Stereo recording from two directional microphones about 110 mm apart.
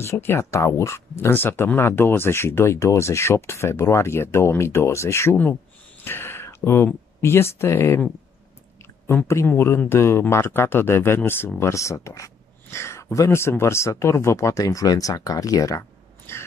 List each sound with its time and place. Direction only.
0.0 s speech: 20° left (ahead or behind)
9.0 s speech: 25° left (ahead or behind)
16.3 s a sound: 25° left (ahead or behind)